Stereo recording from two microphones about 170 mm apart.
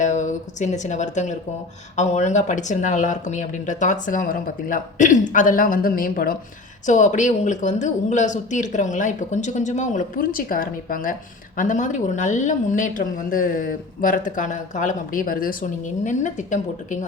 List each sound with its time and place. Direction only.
0.0 s speech: 45° left (ahead or behind)
6.8 s speech: 45° left (ahead or behind)